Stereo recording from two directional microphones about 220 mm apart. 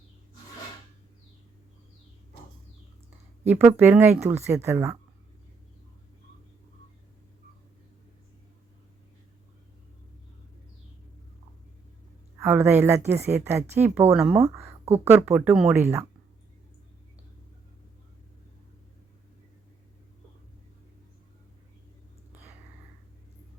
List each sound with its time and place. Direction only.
3.4 s speech: 10° right (ahead or behind)
12.4 s speech: 10° right (ahead or behind)